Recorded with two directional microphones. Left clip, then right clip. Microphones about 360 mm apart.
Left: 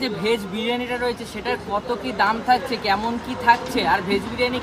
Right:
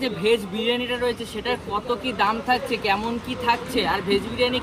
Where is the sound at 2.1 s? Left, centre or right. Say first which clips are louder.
Left 4 dB; centre.